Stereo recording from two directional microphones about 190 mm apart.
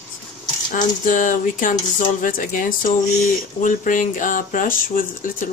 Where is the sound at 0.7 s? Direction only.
45° left (ahead or behind).